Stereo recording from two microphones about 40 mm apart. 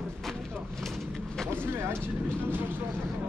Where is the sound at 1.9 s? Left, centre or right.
Right.